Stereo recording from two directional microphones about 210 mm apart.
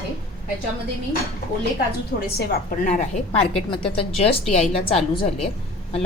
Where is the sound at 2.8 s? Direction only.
35° left (ahead or behind).